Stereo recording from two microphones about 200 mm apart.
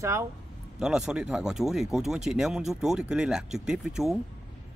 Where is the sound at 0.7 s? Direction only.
5° right (ahead or behind).